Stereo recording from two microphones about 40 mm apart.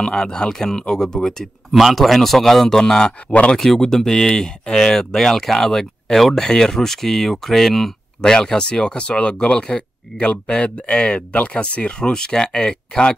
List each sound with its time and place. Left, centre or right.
0.0 s speech: centre
1.8 s a man's voice: centre
3.3 s speech: left
3.5 s speech: centre
8.2 s speech: centre